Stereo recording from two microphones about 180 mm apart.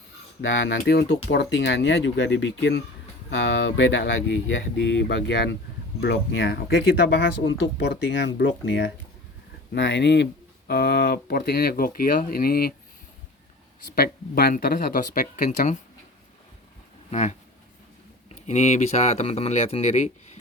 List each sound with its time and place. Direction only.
0.4 s speech: 90° left
9.7 s speech: 75° left (ahead or behind)
10.7 s speech: 60° left (ahead or behind)
13.9 s speech: 60° left (ahead or behind); by 15.8 s 40° left (ahead or behind)
17.1 s speech: 40° left (ahead or behind)